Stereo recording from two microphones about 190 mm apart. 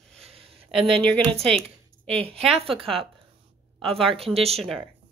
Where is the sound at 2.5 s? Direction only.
30° right (ahead or behind).